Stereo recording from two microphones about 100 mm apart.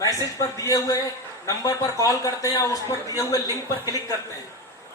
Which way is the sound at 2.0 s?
35° left (ahead or behind).